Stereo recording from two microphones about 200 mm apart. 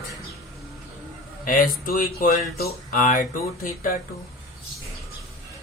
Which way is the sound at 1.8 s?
45° left (ahead or behind).